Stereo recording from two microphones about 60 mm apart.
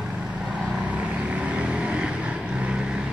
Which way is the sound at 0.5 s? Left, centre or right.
Right.